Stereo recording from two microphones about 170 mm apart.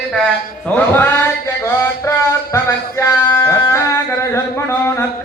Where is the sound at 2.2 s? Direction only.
20° left (ahead or behind).